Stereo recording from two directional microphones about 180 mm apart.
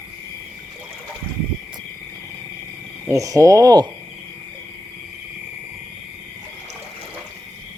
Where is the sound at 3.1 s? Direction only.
20° right (ahead or behind).